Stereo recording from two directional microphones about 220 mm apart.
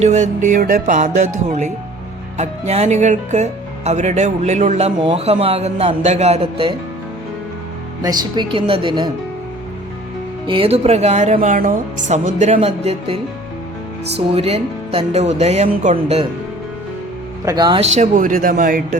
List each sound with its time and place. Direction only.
0.0 s speech: 35° right (ahead or behind)
8.0 s speech: 20° right (ahead or behind)
10.4 s speech: 25° right (ahead or behind)
14.3 s speech: 25° right (ahead or behind)
17.4 s speech: 20° right (ahead or behind); by 18.8 s 40° right (ahead or behind)